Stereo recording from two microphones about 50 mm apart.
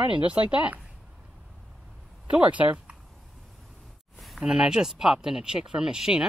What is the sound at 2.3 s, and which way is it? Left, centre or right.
Speech, right.